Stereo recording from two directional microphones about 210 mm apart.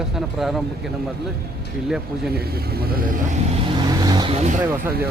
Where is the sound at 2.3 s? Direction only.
45° right (ahead or behind).